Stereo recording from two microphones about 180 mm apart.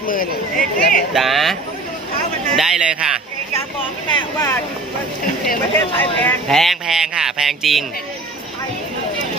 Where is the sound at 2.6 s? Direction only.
5° right (ahead or behind).